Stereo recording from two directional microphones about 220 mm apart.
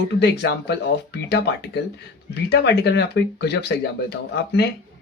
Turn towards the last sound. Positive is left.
turn(degrees=50)  # may be behind; listen again after turning